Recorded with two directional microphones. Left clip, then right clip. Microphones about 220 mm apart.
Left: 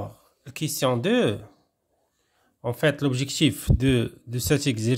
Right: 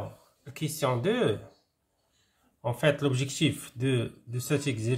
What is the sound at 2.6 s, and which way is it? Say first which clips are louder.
Speech: left 3 dB; 40° left (ahead or behind).